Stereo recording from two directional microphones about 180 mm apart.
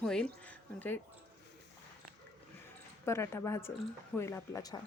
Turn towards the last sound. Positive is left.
turn(degrees=20)  # may be behind; listen again after turning